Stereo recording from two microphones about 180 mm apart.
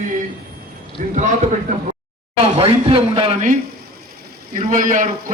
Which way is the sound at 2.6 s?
30° right (ahead or behind).